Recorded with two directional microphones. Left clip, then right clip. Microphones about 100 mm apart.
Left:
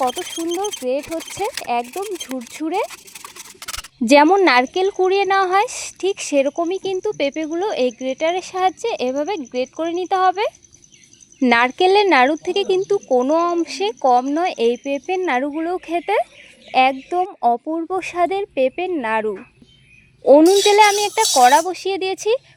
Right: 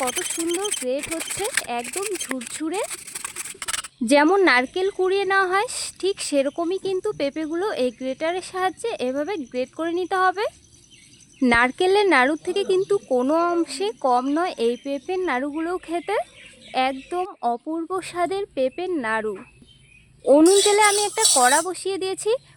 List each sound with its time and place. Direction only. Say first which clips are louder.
0.5 s speech: left 5 dB; 15° left (ahead or behind)
1.9 s speech: left 2 dB; 5° left (ahead or behind)
4.0 s speech: left 6 dB; 35° left (ahead or behind)
4.4 s speech: left 4 dB; 25° left (ahead or behind)
20.7 s speech: left 5 dB; 25° left (ahead or behind)